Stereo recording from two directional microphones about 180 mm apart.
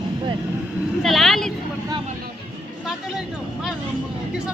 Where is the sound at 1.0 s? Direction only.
Centre (ahead or behind).